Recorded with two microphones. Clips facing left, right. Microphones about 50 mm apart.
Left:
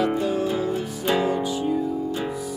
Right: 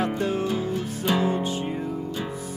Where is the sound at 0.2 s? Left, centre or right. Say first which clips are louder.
Left 2 dB; right.